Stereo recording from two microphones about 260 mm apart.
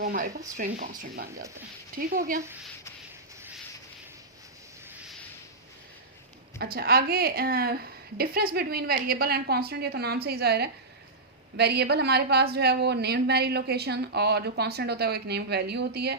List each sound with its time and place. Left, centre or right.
0.0 s a woman's voice: right
6.6 s a woman's voice: right